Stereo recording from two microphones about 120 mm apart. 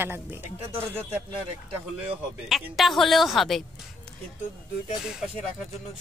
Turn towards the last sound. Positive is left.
turn(degrees=-5)  # may be behind; listen again after turning